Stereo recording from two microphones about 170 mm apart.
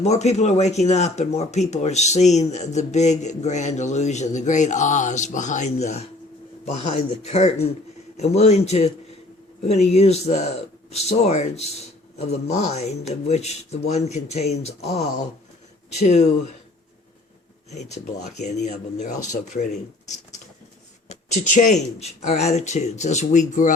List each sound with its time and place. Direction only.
0.0 s speech: 40° left (ahead or behind)
17.7 s speech: 40° left (ahead or behind)
21.1 s speech: 45° left (ahead or behind)